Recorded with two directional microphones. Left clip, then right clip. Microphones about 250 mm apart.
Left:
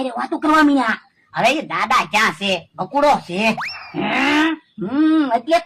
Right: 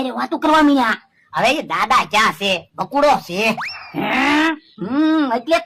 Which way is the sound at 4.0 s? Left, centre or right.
Right.